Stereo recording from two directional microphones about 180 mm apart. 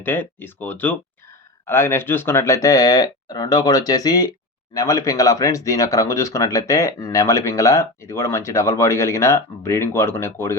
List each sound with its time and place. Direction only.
0.0 s speech: 10° left (ahead or behind)